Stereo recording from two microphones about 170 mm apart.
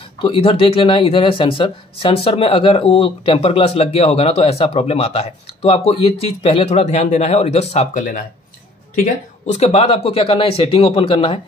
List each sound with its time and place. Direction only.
0.2 s speech: 30° left (ahead or behind); by 8.3 s 50° left (ahead or behind)
9.5 s speech: 35° left (ahead or behind)